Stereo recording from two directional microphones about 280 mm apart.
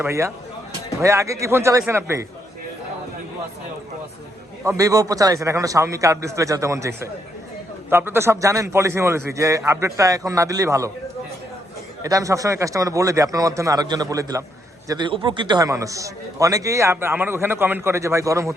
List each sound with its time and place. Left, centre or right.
0.0 s a man's voice: centre
4.6 s a man's voice: centre
12.0 s a man's voice: centre